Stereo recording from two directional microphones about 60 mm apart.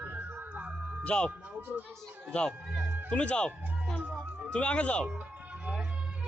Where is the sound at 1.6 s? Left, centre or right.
Right.